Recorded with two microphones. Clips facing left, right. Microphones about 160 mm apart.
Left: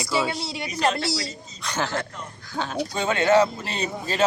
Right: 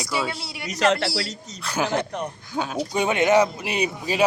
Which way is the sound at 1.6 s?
10° right (ahead or behind).